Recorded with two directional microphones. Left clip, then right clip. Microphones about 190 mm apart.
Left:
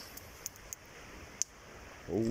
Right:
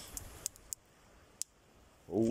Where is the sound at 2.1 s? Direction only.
25° right (ahead or behind).